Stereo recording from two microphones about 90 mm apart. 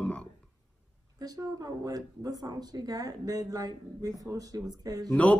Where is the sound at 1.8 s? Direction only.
40° right (ahead or behind).